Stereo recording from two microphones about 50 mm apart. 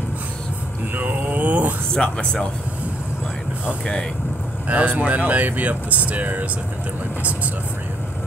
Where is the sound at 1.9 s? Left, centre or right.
Centre.